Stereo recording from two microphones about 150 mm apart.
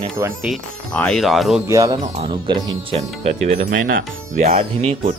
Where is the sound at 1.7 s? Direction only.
20° right (ahead or behind).